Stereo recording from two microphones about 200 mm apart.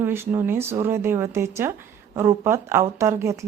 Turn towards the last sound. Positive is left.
turn(degrees=-15)  # may be behind; listen again after turning